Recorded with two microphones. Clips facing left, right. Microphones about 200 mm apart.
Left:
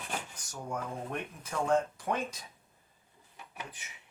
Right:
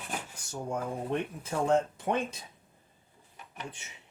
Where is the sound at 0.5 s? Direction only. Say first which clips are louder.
Right 4 dB; 25° right (ahead or behind).